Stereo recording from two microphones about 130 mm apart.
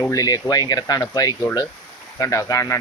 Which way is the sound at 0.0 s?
25° left (ahead or behind).